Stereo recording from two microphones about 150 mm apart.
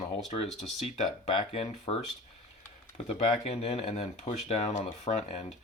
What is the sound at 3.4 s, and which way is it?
Speech, 45° left (ahead or behind).